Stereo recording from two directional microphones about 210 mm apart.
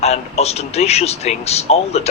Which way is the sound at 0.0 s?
30° left (ahead or behind).